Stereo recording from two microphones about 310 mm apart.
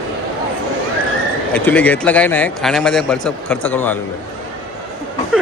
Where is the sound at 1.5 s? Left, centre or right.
Centre.